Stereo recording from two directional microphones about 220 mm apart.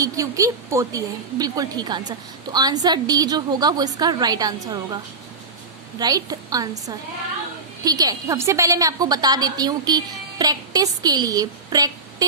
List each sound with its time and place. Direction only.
0.0 s a woman's voice: 15° right (ahead or behind)
6.0 s a woman's voice: 15° right (ahead or behind)